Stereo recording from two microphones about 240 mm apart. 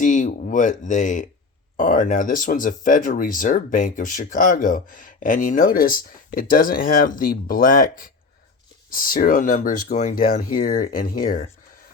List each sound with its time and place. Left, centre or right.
0.0 s speech: left